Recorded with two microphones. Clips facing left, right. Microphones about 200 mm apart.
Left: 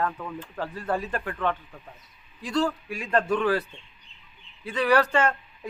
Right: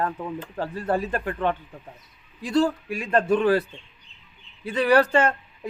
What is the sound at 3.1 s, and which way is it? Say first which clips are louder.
Speech: right 4 dB; 25° right (ahead or behind).